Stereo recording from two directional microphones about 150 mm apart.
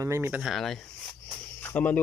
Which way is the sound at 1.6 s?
10° left (ahead or behind).